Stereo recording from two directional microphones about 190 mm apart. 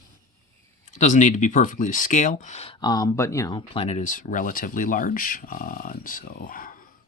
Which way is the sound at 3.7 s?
30° left (ahead or behind).